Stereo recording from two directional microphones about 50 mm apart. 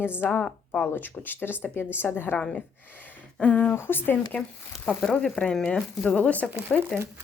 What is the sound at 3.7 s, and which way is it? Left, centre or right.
Speech, left.